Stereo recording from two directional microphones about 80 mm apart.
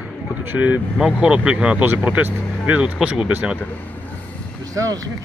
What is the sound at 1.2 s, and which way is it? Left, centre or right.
Speech, centre.